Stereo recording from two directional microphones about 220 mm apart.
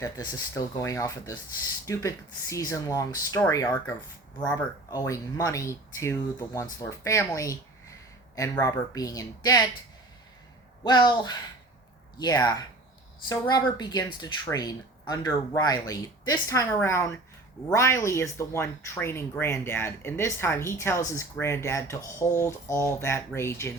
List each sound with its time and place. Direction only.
0.0 s speech: 15° left (ahead or behind)
10.8 s speech: 20° left (ahead or behind)